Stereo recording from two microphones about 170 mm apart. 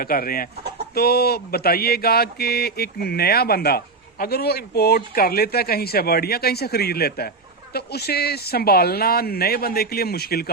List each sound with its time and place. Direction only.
0.0 s speech: 60° left (ahead or behind)